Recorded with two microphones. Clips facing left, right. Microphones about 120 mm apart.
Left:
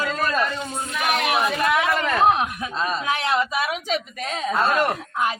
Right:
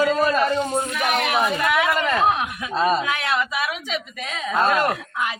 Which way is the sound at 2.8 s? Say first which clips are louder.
Right 7 dB; 30° right (ahead or behind).